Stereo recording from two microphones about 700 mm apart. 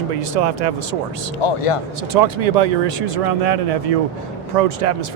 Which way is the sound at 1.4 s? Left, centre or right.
Left.